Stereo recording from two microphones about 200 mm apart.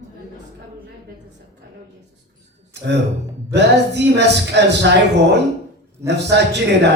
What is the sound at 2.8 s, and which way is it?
A man's voice, 60° right (ahead or behind).